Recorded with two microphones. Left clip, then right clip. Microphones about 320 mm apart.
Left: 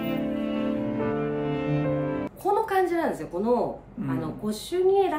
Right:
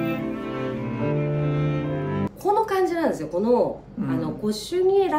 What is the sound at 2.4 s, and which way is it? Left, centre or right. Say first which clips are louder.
A woman's voice: right 2 dB; centre.